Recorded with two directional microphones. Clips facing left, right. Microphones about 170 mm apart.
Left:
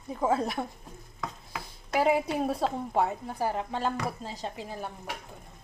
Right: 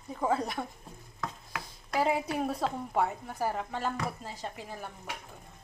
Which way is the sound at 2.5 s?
20° left (ahead or behind).